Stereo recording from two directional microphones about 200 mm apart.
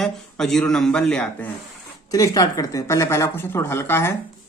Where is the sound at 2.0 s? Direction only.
20° left (ahead or behind).